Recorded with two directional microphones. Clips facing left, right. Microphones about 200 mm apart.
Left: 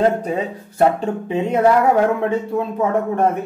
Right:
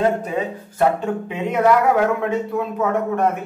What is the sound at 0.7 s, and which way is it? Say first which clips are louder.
Speech: left 2 dB; 30° left (ahead or behind).